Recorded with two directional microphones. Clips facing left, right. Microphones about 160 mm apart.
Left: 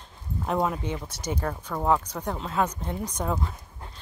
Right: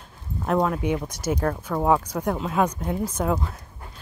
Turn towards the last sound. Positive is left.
turn(degrees=0)  # may be behind; listen again after turning